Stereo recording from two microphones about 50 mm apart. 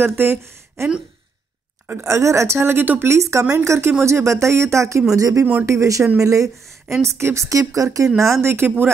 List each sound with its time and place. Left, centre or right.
0.0 s a woman's voice: right
2.0 s speech: right
2.6 s speech: right
3.1 s speech: right
5.4 s speech: right
5.7 s a woman's voice: right
8.2 s speech: right